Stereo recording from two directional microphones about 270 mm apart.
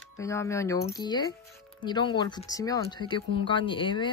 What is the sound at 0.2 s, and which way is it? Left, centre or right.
Speech, centre.